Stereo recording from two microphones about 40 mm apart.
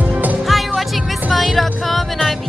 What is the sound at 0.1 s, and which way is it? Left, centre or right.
Music, right.